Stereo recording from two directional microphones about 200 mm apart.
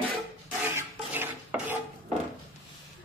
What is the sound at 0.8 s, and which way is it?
Stir, 10° right (ahead or behind).